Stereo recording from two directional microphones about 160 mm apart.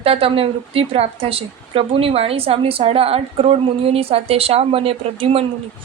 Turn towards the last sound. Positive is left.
turn(degrees=-35)  # may be behind; listen again after turning